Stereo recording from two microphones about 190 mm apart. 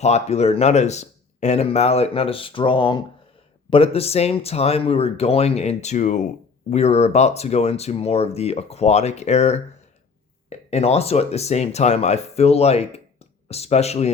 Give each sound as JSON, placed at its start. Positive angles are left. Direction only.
{"t": 0.0, "sound": "speech", "side_deg": 35}
{"t": 10.7, "sound": "speech", "side_deg": 35}